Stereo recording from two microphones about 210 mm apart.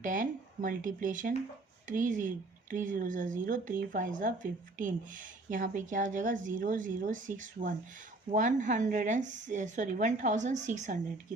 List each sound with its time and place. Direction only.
0.0 s a woman's voice: 40° right (ahead or behind)